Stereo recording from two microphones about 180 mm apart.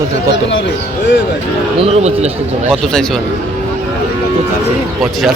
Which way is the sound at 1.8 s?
35° right (ahead or behind).